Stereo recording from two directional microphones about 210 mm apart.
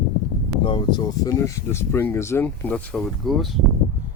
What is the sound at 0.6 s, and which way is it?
Speech, 20° left (ahead or behind).